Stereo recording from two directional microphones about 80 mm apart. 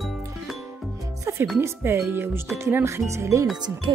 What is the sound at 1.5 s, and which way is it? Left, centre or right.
Music, right.